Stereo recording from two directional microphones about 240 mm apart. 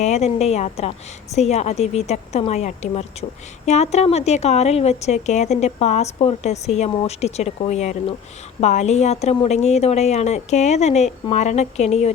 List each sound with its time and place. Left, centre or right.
0.0 s speech: left